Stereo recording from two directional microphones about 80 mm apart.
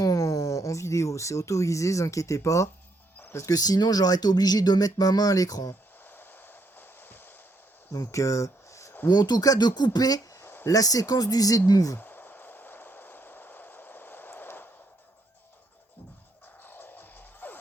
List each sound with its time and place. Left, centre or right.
0.0 s speech: left
3.2 s music: left
3.5 s speech: left
6.1 s vehicle: left
7.9 s speech: left
9.0 s speech: left
10.4 s a sound: left
10.7 s speech: left
11.9 s a sound: left
16.6 s music: left